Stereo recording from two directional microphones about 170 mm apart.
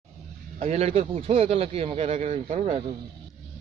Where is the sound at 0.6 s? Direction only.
40° right (ahead or behind).